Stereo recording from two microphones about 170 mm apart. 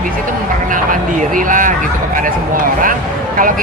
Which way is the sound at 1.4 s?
50° right (ahead or behind).